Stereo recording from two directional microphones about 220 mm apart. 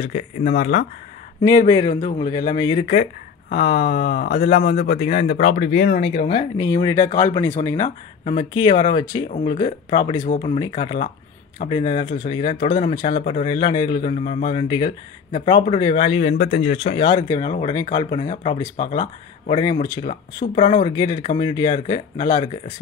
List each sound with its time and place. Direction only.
0.0 s speech: 30° left (ahead or behind)
1.7 s speech: 20° left (ahead or behind)
2.9 s speech: 40° left (ahead or behind); by 13.9 s 20° left (ahead or behind)
13.9 s speech: 35° left (ahead or behind)
16.2 s speech: 35° left (ahead or behind)
18.8 s speech: 35° left (ahead or behind)
20.8 s speech: 20° left (ahead or behind)